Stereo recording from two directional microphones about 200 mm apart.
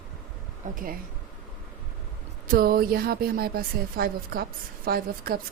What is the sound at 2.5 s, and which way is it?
Speech, 45° right (ahead or behind).